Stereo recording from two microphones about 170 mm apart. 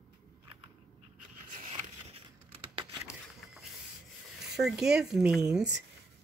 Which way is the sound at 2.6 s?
30° right (ahead or behind).